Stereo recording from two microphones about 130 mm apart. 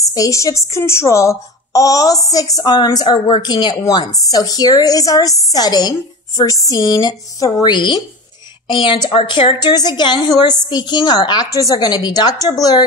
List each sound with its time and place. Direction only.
0.1 s a woman's voice: 25° left (ahead or behind)